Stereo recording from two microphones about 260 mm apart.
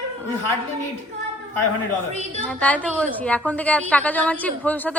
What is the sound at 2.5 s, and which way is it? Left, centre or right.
A woman's voice, centre.